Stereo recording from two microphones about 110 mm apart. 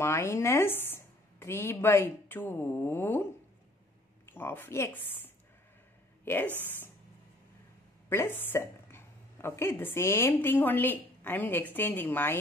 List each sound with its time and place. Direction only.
0.0 s a woman's voice: 25° left (ahead or behind)
4.3 s a woman's voice: 20° left (ahead or behind)
8.1 s a woman's voice: 20° left (ahead or behind)